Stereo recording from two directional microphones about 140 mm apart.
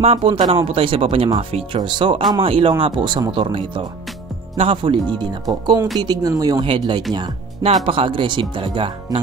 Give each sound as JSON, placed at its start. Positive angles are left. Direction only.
{"t": 0.0, "sound": "speech", "side_deg": -45}